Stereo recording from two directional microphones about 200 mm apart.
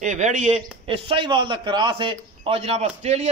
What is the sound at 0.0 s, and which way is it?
A man's voice, 40° right (ahead or behind).